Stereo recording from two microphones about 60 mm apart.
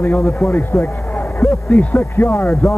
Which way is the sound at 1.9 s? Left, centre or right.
Left.